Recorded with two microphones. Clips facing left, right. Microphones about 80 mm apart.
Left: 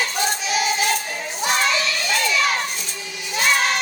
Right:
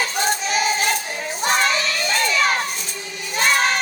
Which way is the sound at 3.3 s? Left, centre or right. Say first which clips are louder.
Right 1 dB; right.